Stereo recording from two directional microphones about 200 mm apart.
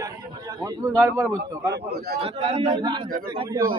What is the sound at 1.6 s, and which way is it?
Speech, 55° right (ahead or behind).